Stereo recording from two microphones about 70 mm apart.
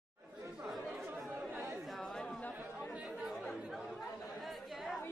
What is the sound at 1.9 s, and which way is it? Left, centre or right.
Chatter, centre.